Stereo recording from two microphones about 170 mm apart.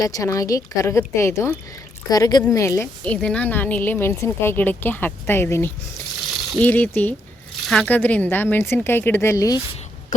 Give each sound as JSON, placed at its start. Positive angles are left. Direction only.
{"t": 0.0, "sound": "a woman's voice", "side_deg": 20}